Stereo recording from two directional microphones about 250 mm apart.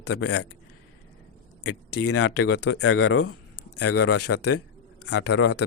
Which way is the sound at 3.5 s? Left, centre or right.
Left.